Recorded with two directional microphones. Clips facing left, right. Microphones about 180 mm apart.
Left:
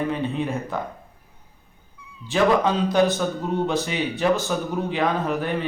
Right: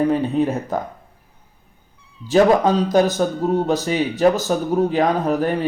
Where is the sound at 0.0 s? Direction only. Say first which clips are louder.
Right 7 dB; 40° right (ahead or behind).